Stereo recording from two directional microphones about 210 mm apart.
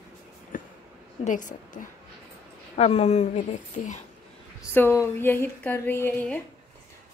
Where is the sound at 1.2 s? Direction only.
40° left (ahead or behind).